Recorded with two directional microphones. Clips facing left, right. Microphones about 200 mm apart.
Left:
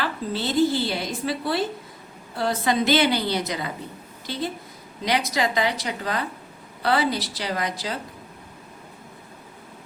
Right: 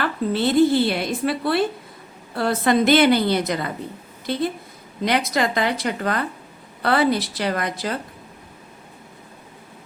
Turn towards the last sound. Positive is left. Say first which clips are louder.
# right 3 dB
turn(degrees=-55)  # may be behind; listen again after turning